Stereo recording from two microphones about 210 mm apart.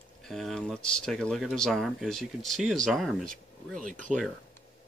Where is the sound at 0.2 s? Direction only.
Centre (ahead or behind).